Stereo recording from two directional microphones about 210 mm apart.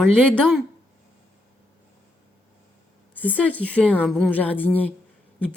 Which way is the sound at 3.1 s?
10° left (ahead or behind).